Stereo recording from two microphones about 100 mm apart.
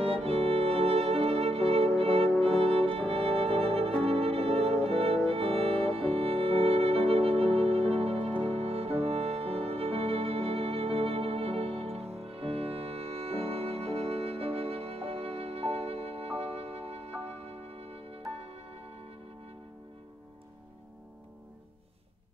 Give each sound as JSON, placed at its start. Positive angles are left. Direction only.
{"t": 0.2, "sound": "music", "side_deg": -75}